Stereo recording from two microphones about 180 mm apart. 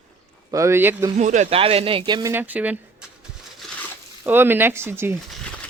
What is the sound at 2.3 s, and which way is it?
Speech, 10° right (ahead or behind).